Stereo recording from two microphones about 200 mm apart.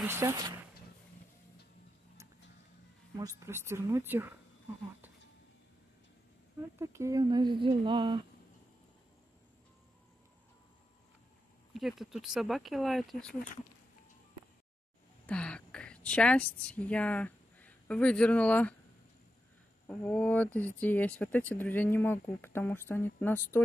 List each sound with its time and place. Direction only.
0.0 s speech: 15° right (ahead or behind)
3.2 s speech: 15° right (ahead or behind)
6.8 s speech: 15° right (ahead or behind)
11.7 s speech: centre (ahead or behind)
15.2 s a woman's voice: 5° left (ahead or behind)
19.9 s speech: 5° left (ahead or behind)